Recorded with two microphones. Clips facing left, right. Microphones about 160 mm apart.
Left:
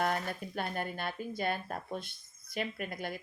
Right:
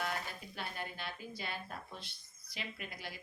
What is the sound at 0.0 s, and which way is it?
Speech, 50° left (ahead or behind).